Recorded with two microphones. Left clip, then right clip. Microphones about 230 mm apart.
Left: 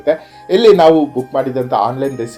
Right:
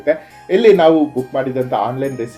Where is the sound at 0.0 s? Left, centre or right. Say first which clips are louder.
Left 2 dB; centre.